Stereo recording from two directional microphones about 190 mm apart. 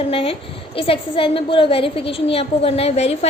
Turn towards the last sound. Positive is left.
turn(degrees=35)  # may be behind; listen again after turning